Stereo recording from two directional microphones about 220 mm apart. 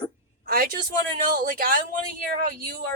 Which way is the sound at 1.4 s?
40° right (ahead or behind).